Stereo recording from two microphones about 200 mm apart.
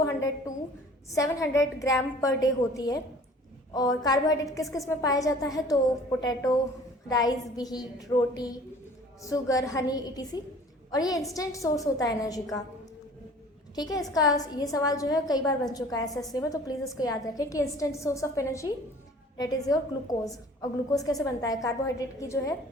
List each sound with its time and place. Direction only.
0.0 s a woman's voice: 15° left (ahead or behind)
14.1 s a woman's voice: 15° left (ahead or behind)